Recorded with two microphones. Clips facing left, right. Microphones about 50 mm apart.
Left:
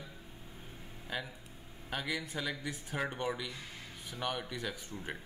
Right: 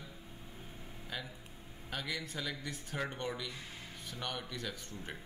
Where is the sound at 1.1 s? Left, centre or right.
Centre.